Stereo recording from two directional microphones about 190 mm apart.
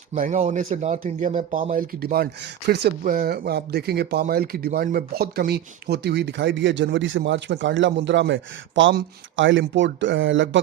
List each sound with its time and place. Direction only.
0.1 s a man's voice: 40° right (ahead or behind); by 10.6 s 80° right